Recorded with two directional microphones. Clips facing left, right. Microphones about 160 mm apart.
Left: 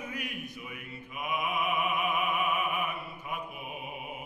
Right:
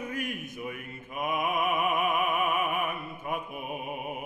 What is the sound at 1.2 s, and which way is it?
Opera, 50° right (ahead or behind).